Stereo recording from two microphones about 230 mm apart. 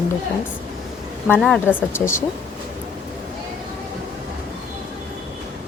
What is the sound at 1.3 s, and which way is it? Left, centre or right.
Speech, centre.